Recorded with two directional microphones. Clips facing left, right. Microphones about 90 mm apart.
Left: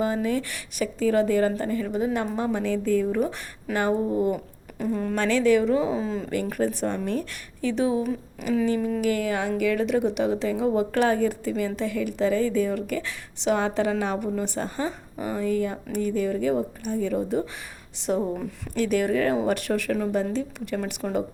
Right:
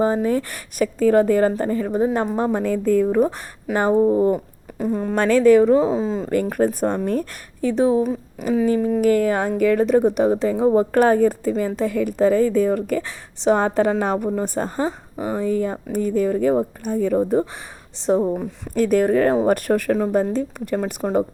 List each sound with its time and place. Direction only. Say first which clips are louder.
0.0 s speech: right 6 dB; 35° right (ahead or behind)
3.8 s speech: right 7 dB; 30° right (ahead or behind)
5.1 s speech: right 7 dB; 45° right (ahead or behind); by 6.3 s 25° right (ahead or behind)
6.3 s speech: right 7 dB; 45° right (ahead or behind)
18.0 s speech: right 7 dB; 30° right (ahead or behind)
18.7 s speech: right 6 dB; 40° right (ahead or behind)